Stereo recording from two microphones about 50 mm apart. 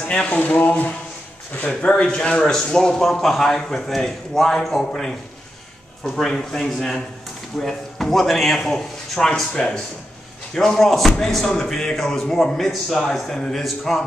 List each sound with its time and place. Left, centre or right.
0.1 s speech: left
1.9 s a man's voice: centre
6.1 s a man's voice: centre
9.3 s a man's voice: centre